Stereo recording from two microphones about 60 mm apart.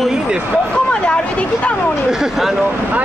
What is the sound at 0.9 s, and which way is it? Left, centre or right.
Speech, centre.